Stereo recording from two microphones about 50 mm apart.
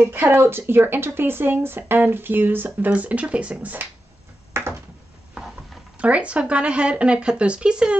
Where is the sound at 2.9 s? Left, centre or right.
Right.